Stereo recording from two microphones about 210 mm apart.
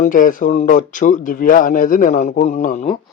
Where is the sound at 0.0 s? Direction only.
40° left (ahead or behind).